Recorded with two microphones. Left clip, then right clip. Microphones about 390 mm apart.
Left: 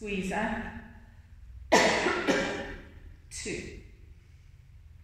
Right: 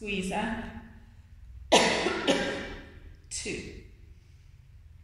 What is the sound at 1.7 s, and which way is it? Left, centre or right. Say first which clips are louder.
Cough: right 1 dB; centre.